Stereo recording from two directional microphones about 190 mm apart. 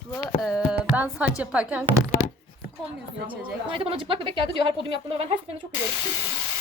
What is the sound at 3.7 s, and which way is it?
A woman's voice, 30° right (ahead or behind).